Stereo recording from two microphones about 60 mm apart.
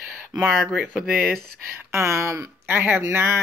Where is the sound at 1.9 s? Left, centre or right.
Right.